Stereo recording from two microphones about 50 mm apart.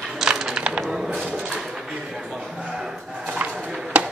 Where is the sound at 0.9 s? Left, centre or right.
Centre.